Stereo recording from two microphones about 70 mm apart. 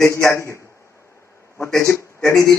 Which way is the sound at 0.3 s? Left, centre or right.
Left.